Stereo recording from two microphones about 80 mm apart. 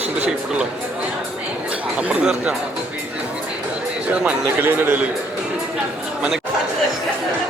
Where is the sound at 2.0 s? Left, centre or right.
Centre.